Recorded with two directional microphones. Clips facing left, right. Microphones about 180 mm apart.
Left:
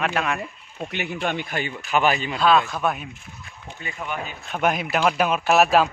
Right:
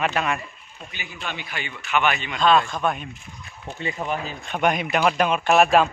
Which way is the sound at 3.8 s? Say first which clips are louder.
Right 4 dB; 35° right (ahead or behind).